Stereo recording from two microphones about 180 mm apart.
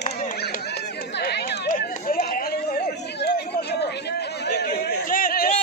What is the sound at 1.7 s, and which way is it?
Chatter, 50° left (ahead or behind).